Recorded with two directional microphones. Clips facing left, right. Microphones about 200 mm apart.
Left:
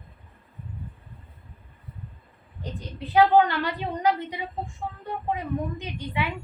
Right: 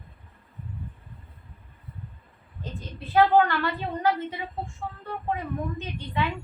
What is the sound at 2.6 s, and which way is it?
A woman's voice, 15° left (ahead or behind).